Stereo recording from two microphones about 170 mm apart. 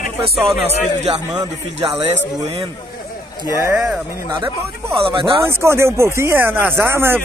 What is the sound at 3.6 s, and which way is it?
Speech, 15° right (ahead or behind).